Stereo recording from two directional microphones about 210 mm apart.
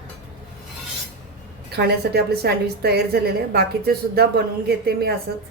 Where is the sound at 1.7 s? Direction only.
50° right (ahead or behind).